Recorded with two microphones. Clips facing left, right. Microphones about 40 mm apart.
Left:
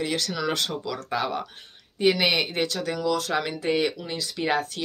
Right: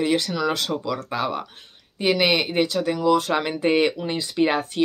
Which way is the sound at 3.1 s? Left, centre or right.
Right.